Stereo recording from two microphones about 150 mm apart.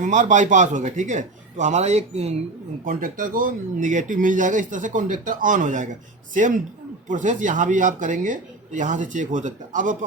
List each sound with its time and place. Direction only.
0.0 s a man's voice: 55° right (ahead or behind)
2.8 s speech: 70° right (ahead or behind)